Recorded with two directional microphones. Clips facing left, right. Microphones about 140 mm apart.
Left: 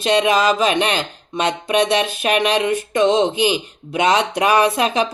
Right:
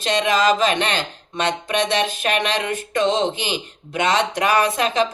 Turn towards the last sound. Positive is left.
turn(degrees=15)  # may be behind; listen again after turning